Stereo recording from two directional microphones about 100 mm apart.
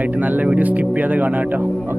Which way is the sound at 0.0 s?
15° right (ahead or behind).